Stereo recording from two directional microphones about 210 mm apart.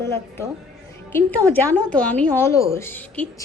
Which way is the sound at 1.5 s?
10° left (ahead or behind).